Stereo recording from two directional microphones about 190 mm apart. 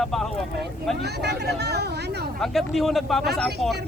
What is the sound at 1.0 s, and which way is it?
Speech, 60° right (ahead or behind).